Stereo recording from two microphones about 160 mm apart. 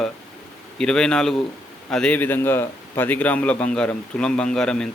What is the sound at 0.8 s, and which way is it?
Speech, 5° left (ahead or behind).